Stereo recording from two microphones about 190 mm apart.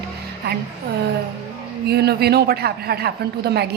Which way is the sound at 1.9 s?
55° right (ahead or behind).